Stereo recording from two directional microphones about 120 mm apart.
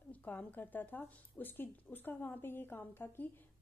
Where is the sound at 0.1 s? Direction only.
15° left (ahead or behind).